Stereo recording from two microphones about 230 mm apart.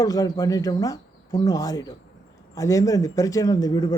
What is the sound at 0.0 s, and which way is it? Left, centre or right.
A man's voice, centre.